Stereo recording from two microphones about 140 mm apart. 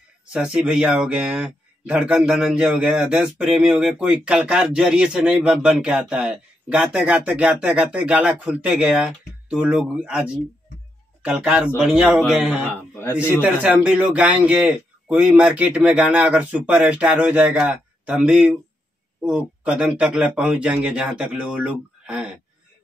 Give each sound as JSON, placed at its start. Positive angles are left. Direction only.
{"t": 0.3, "sound": "a man's voice", "side_deg": -10}
{"t": 12.6, "sound": "speech", "side_deg": 15}
{"t": 13.4, "sound": "speech", "side_deg": -10}